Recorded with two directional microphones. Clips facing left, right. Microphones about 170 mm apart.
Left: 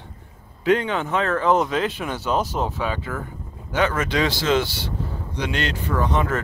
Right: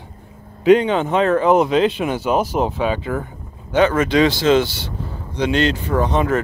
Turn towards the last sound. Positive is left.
turn(degrees=-20)  # may be behind; listen again after turning